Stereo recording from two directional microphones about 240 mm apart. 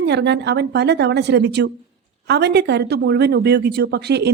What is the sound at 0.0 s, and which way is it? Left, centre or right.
Speech, right.